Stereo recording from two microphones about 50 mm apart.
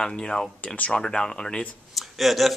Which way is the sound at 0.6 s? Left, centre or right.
Left.